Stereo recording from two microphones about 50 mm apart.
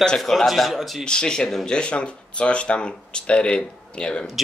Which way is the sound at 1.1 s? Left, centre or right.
Centre.